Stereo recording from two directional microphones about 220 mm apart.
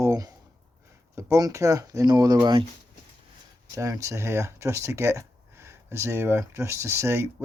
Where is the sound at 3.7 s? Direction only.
15° right (ahead or behind).